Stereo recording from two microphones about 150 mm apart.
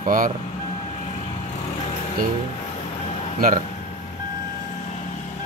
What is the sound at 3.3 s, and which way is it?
Speech, 65° right (ahead or behind).